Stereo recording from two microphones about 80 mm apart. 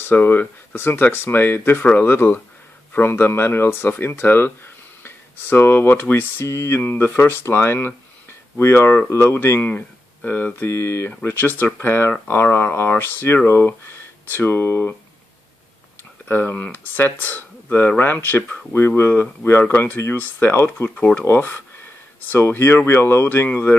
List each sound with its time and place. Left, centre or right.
0.0 s speech: left
16.3 s speech: left